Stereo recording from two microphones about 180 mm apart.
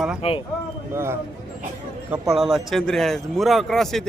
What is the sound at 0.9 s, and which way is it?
Speech, 15° right (ahead or behind).